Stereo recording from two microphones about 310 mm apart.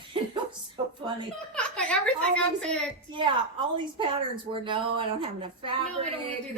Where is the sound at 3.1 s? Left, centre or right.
Centre.